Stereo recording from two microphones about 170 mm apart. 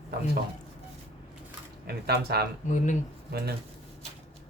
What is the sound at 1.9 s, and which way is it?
Speech, 70° right (ahead or behind).